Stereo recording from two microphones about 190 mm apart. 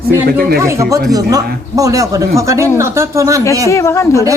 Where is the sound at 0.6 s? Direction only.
15° right (ahead or behind).